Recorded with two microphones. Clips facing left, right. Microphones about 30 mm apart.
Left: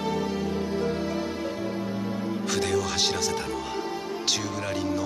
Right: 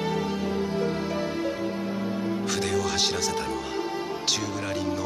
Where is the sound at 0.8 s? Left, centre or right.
Right.